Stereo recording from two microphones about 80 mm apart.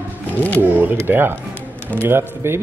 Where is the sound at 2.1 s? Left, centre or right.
Right.